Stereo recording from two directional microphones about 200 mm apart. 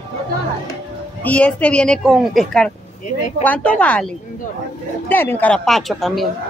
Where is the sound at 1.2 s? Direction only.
5° left (ahead or behind).